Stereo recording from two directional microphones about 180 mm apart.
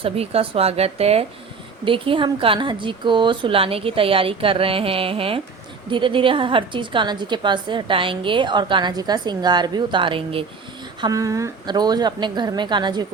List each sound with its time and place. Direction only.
0.0 s a woman's voice: 35° right (ahead or behind)
11.0 s a woman's voice: 20° right (ahead or behind)